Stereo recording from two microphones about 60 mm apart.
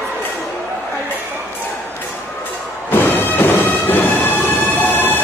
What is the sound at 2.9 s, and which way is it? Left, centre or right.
Music, left.